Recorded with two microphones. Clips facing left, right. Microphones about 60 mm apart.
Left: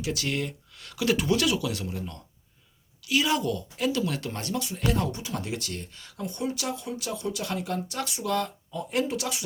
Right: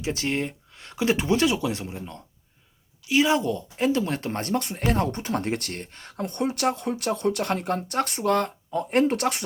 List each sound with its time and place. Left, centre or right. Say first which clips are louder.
0.0 s speech: right 3 dB; right